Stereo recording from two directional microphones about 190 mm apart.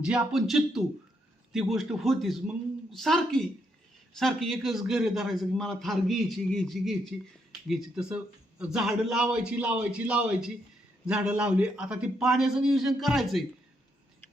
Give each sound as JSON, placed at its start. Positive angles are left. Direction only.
{"t": 0.0, "sound": "a man's voice", "side_deg": -5}